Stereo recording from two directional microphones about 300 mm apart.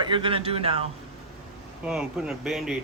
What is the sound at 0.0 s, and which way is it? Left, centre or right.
Speech, centre.